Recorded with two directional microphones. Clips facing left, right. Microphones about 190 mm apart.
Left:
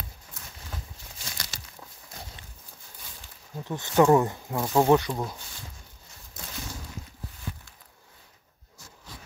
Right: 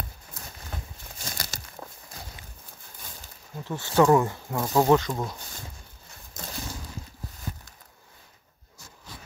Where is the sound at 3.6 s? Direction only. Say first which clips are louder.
Even; 15° left (ahead or behind).